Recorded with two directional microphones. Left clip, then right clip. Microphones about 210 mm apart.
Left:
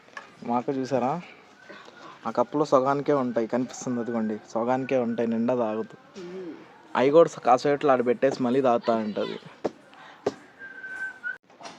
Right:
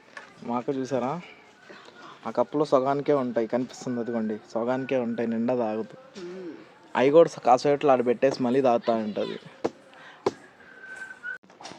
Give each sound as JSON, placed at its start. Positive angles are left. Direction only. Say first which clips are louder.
{"t": 0.1, "sound": "speech", "louder": "left 3 dB", "side_deg": 10}
{"t": 6.9, "sound": "speech", "louder": "even", "side_deg": -5}